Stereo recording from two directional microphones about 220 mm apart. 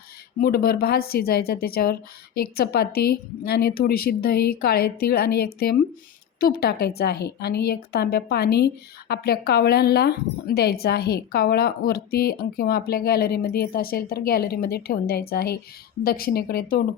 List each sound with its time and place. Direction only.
0.4 s a woman's voice: 45° left (ahead or behind)